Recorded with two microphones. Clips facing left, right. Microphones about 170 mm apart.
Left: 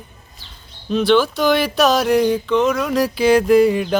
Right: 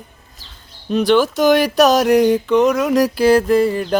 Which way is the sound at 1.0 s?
45° right (ahead or behind).